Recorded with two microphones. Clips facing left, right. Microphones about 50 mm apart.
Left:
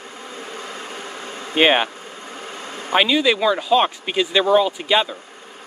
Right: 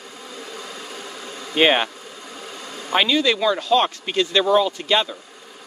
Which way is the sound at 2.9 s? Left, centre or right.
Centre.